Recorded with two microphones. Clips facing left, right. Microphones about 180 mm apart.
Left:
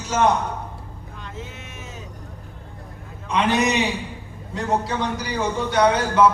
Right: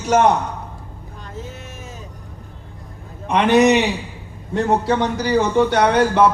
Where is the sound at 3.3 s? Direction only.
65° right (ahead or behind).